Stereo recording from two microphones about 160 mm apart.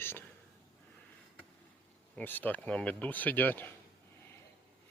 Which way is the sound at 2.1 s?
10° left (ahead or behind).